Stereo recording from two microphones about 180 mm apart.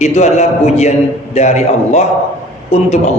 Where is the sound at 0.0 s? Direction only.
40° left (ahead or behind).